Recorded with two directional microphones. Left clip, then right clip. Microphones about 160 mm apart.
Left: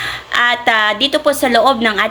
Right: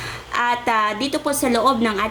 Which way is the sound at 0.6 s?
15° right (ahead or behind).